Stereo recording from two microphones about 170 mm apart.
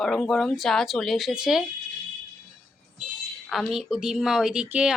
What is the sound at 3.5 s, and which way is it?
Speech, centre (ahead or behind).